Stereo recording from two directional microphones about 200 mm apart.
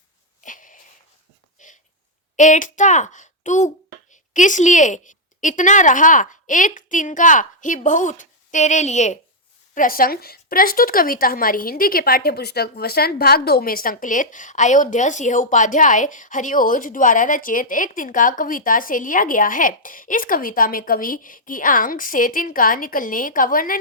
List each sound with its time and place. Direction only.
0.4 s a sound: 40° left (ahead or behind)
1.5 s dog: 40° left (ahead or behind)
2.3 s a child's voice: 40° left (ahead or behind)